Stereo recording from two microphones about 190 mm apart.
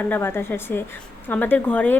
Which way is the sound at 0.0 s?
10° left (ahead or behind).